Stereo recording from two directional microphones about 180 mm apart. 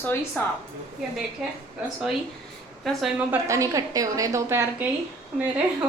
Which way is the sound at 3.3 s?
15° right (ahead or behind).